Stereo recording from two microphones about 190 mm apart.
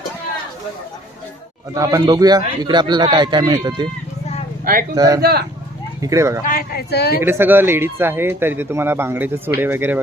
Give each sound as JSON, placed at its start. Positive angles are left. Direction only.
{"t": 1.7, "sound": "a man's voice", "side_deg": -20}
{"t": 4.6, "sound": "speech", "side_deg": -50}
{"t": 4.9, "sound": "a man's voice", "side_deg": -20}
{"t": 5.2, "sound": "speech", "side_deg": -55}
{"t": 6.0, "sound": "speech", "side_deg": -15}
{"t": 6.4, "sound": "speech", "side_deg": 50}
{"t": 7.2, "sound": "speech", "side_deg": -10}